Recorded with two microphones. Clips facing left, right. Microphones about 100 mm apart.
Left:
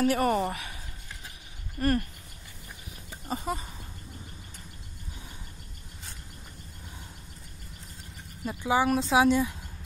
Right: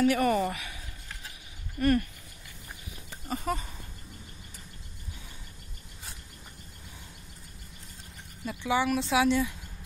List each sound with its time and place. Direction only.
0.0 s a woman's voice: 40° left (ahead or behind)
1.8 s a woman's voice: 35° left (ahead or behind)
3.3 s speech: 20° left (ahead or behind)
8.5 s speech: 25° left (ahead or behind)